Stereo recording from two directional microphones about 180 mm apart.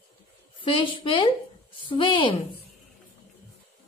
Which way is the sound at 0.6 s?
30° left (ahead or behind).